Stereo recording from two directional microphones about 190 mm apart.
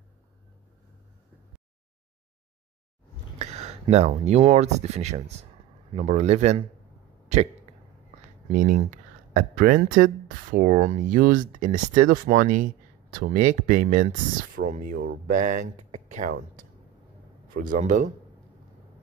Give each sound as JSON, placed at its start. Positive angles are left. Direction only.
{"t": 3.3, "sound": "a sound", "side_deg": -35}
{"t": 3.8, "sound": "speech", "side_deg": -35}
{"t": 8.5, "sound": "speech", "side_deg": -50}
{"t": 15.3, "sound": "speech", "side_deg": -40}
{"t": 17.6, "sound": "speech", "side_deg": -45}